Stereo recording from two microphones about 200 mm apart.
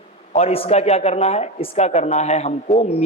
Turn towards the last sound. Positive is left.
turn(degrees=30)  # may be behind; listen again after turning